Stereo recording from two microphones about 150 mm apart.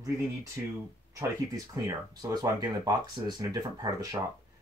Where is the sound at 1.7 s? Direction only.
25° right (ahead or behind).